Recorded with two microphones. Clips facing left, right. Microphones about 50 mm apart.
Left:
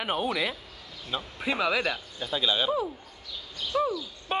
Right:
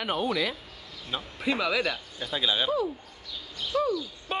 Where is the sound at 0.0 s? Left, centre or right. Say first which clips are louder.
Even; centre.